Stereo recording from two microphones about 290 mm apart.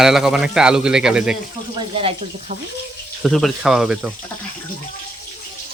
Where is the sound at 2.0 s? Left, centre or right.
Centre.